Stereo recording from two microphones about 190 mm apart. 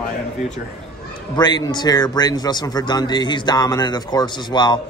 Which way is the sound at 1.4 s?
20° left (ahead or behind).